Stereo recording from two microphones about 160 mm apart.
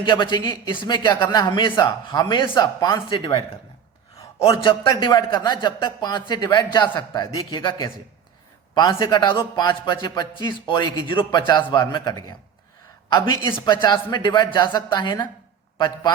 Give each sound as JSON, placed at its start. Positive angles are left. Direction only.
{"t": 0.0, "sound": "a man's voice", "side_deg": 30}
{"t": 4.4, "sound": "a man's voice", "side_deg": 35}
{"t": 13.1, "sound": "a man's voice", "side_deg": 20}